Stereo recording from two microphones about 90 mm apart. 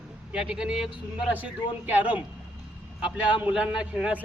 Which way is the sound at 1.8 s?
20° right (ahead or behind).